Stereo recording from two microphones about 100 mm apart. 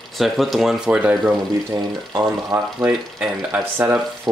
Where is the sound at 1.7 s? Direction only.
45° right (ahead or behind).